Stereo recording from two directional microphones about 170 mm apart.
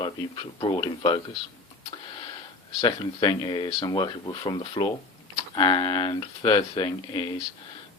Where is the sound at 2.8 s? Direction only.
30° left (ahead or behind).